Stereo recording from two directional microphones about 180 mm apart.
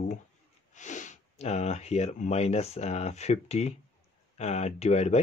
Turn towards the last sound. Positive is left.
turn(degrees=35)  # may be behind; listen again after turning